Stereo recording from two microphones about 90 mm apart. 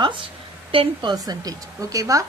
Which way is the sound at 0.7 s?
70° right (ahead or behind).